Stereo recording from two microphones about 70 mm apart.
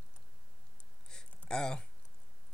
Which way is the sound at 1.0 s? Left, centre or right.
Centre.